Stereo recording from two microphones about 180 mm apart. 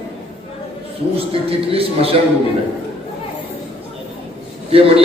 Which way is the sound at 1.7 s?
30° right (ahead or behind).